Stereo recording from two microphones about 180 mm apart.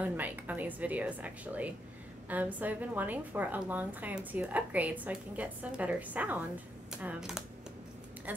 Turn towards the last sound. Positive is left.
turn(degrees=-5)  # may be behind; listen again after turning